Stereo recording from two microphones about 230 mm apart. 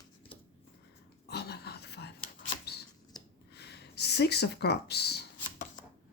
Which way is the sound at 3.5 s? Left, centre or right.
Left.